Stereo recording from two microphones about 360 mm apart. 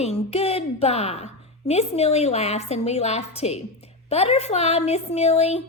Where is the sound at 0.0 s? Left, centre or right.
Centre.